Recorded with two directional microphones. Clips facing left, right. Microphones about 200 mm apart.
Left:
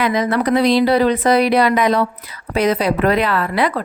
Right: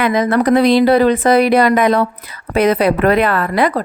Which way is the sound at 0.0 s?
50° right (ahead or behind).